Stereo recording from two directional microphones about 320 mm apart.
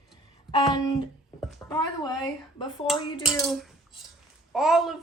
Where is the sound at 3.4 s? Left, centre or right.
Centre.